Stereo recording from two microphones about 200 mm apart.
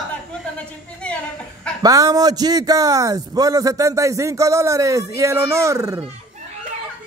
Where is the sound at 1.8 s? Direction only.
15° right (ahead or behind).